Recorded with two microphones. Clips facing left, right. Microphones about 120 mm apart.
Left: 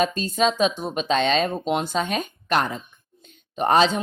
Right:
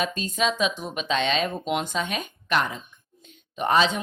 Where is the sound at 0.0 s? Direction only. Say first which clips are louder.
Left 5 dB; 35° left (ahead or behind).